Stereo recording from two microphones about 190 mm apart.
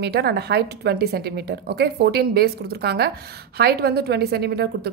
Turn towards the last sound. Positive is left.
turn(degrees=-60)  # may be behind; listen again after turning